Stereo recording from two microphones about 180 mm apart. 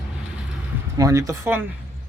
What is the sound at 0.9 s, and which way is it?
Speech, 20° right (ahead or behind).